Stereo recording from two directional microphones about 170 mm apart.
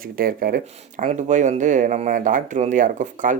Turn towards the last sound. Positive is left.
turn(degrees=-50)  # may be behind; listen again after turning